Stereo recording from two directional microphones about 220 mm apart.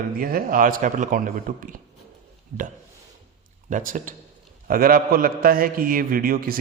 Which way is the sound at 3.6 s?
35° right (ahead or behind).